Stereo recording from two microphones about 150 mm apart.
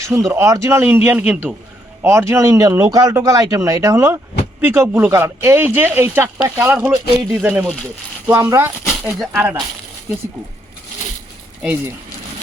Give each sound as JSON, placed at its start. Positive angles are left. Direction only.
{"t": 0.0, "sound": "speech", "side_deg": -20}
{"t": 8.3, "sound": "speech", "side_deg": -15}